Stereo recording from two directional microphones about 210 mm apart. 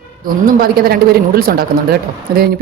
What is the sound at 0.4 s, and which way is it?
Speech, 45° right (ahead or behind).